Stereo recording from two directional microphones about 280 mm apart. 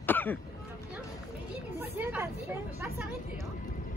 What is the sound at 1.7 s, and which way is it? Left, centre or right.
Speech, centre.